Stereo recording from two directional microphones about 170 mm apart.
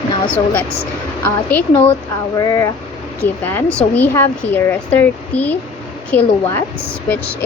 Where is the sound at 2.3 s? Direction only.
20° left (ahead or behind).